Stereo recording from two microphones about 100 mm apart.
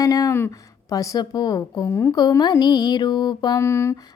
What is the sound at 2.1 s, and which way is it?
Mantra, 45° left (ahead or behind).